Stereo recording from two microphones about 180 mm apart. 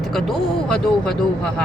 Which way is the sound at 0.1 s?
Centre (ahead or behind).